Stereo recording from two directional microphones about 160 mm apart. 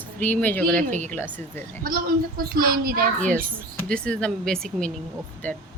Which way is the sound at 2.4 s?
65° right (ahead or behind).